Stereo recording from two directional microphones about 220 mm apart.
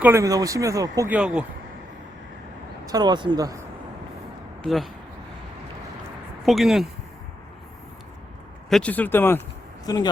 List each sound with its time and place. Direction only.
0.0 s speech: 15° right (ahead or behind)
2.8 s speech: 20° right (ahead or behind)
4.6 s speech: centre (ahead or behind)
6.4 s speech: centre (ahead or behind)
8.7 s speech: 5° left (ahead or behind)